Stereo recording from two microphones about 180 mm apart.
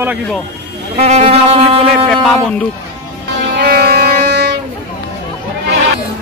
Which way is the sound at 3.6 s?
60° right (ahead or behind).